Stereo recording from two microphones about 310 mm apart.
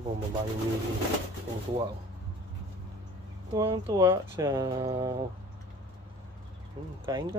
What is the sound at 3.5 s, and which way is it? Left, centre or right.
Speech, centre.